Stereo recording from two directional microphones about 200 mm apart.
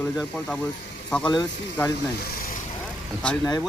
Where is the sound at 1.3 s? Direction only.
20° left (ahead or behind).